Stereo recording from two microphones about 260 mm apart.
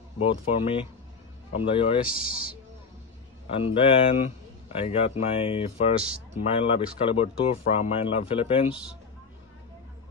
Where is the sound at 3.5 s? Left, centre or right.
Left.